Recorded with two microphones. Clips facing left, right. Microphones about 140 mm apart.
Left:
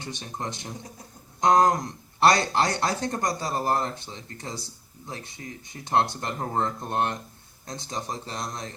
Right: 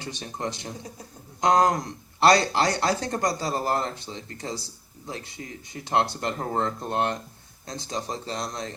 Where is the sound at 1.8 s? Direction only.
30° right (ahead or behind).